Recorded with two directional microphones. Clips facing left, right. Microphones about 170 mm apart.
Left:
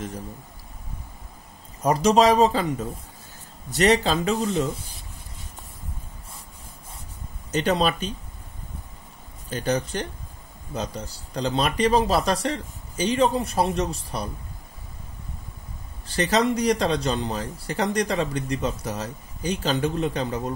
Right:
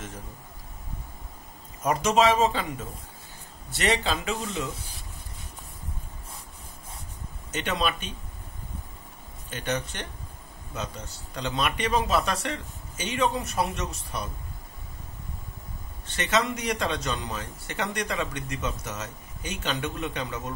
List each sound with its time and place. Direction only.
1.8 s speech: 35° left (ahead or behind)
7.5 s speech: 35° left (ahead or behind)
9.5 s speech: 35° left (ahead or behind)
16.1 s speech: 35° left (ahead or behind)